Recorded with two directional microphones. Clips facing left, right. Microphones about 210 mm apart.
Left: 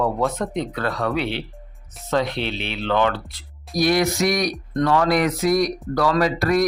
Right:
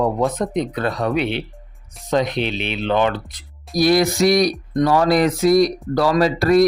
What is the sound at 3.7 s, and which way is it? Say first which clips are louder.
Speech: right 3 dB; 35° right (ahead or behind).